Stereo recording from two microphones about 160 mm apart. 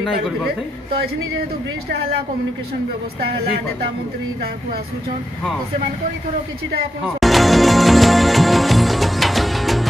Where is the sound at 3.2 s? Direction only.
80° right.